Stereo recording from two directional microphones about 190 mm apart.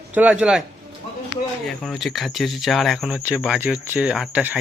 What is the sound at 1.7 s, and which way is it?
Speech, centre (ahead or behind).